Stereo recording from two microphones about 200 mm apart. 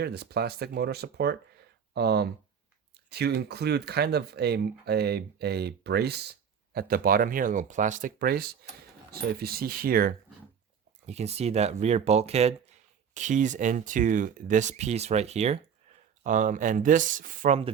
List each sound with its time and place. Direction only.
0.0 s speech: 55° right (ahead or behind)
11.0 s speech: 30° right (ahead or behind)